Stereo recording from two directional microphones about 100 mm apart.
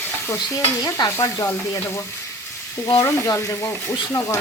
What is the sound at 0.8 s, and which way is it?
Speech, 35° left (ahead or behind).